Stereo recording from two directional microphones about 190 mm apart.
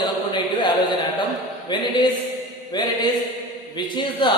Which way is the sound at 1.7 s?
25° left (ahead or behind).